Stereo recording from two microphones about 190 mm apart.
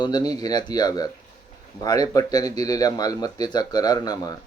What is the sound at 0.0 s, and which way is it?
Speech, 20° left (ahead or behind).